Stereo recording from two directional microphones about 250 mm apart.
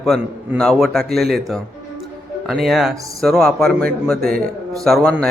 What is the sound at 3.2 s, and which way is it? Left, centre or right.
A man's voice, centre.